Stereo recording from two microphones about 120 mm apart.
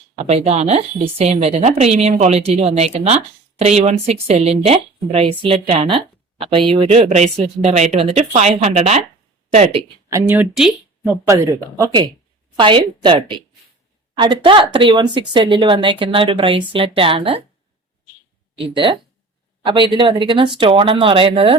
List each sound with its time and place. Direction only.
0.2 s a woman's voice: 60° right (ahead or behind)
10.2 s speech: 15° right (ahead or behind)
10.5 s speech: 5° right (ahead or behind)
11.3 s speech: 25° right (ahead or behind)
12.5 s speech: 45° right (ahead or behind)
18.5 s speech: 50° right (ahead or behind)